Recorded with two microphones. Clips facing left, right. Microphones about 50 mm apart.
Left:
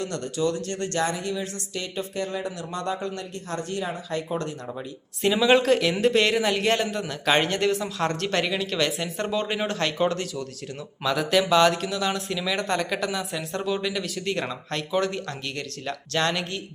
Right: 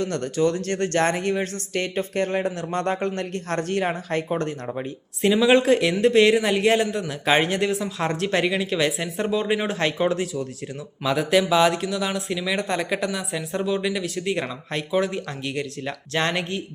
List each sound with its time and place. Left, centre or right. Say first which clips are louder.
0.0 s speech: right 4 dB; right
4.3 s speech: right 4 dB; right
5.2 s a man's voice: right 2 dB; centre; by 16.5 s right